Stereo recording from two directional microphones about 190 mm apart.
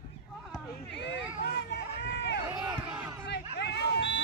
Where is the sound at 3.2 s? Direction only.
60° left (ahead or behind).